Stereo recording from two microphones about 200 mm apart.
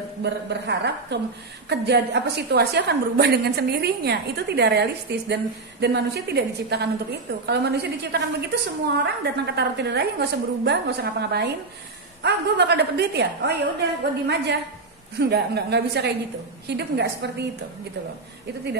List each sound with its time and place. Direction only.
0.2 s a woman's voice: 60° right (ahead or behind)